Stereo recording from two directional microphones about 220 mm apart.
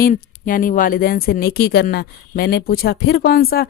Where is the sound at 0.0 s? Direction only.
40° left (ahead or behind).